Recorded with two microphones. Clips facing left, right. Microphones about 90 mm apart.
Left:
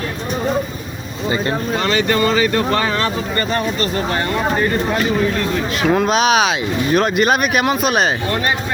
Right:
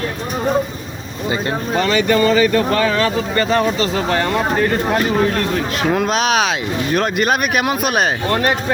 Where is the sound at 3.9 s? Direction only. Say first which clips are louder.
Right 2 dB; 90° right.